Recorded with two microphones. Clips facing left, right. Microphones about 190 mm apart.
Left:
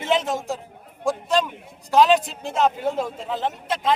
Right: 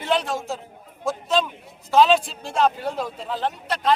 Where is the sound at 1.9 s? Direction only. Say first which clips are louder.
Even; 15° left (ahead or behind).